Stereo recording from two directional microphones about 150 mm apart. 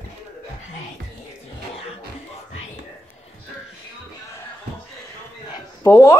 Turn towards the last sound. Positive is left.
turn(degrees=20)  # may be behind; listen again after turning